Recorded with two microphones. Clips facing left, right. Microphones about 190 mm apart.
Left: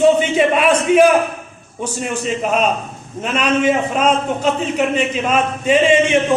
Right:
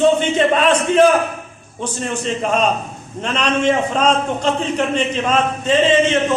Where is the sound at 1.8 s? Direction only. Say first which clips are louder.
Left 1 dB; 10° left (ahead or behind).